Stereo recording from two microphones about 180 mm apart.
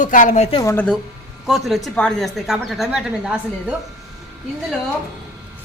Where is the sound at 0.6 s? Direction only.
10° left (ahead or behind).